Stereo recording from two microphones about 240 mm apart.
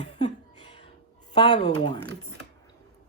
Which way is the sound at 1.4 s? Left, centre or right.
Centre.